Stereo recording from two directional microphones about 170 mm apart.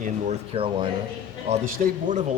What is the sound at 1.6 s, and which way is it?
Speech, 50° right (ahead or behind).